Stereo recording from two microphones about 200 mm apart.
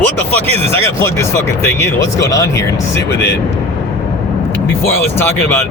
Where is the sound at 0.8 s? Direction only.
15° left (ahead or behind).